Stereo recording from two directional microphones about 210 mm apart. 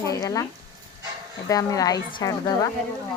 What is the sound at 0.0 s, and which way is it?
Speech, 15° left (ahead or behind).